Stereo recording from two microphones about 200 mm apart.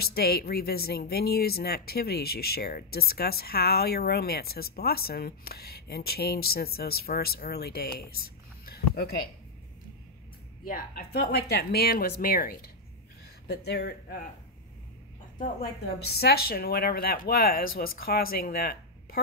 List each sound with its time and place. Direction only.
0.0 s speech: 50° left (ahead or behind)
10.7 s speech: 50° left (ahead or behind)
15.4 s speech: 50° left (ahead or behind)